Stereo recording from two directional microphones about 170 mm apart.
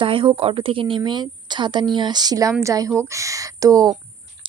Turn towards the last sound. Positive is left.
turn(degrees=-20)  # may be behind; listen again after turning